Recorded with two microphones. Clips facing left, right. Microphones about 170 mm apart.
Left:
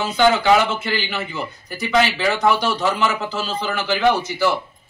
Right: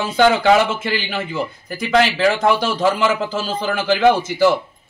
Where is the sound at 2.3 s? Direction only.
50° right (ahead or behind).